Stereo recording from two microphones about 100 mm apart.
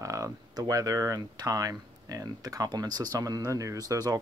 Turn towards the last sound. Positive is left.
turn(degrees=-40)  # may be behind; listen again after turning